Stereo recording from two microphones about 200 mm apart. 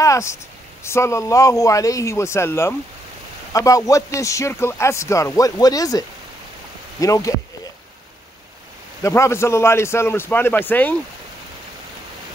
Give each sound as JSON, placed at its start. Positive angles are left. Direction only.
{"t": 0.0, "sound": "speech", "side_deg": 15}
{"t": 9.0, "sound": "speech", "side_deg": 15}